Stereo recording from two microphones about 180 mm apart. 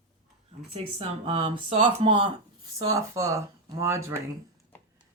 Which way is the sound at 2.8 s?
15° right (ahead or behind).